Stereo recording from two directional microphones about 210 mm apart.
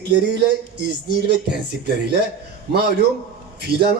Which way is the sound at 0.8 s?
50° right (ahead or behind).